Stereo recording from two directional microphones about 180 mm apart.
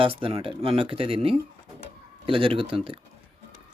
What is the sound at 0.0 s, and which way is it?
Speech, 30° right (ahead or behind).